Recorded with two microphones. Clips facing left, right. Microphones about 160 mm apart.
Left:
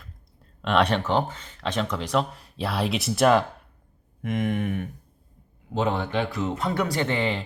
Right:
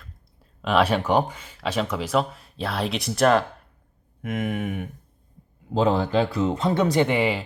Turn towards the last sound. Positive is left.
turn(degrees=-10)  # may be behind; listen again after turning